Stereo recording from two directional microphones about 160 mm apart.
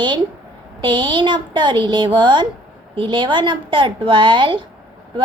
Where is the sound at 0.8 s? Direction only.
30° right (ahead or behind).